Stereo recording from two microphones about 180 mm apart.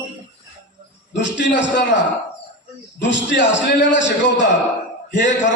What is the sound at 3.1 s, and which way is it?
A man's voice, 85° left.